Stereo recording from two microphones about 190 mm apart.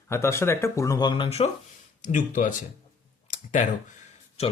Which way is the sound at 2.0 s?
40° left (ahead or behind).